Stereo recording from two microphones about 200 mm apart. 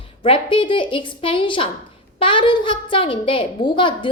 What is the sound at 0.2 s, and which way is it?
A woman's voice, 25° left (ahead or behind).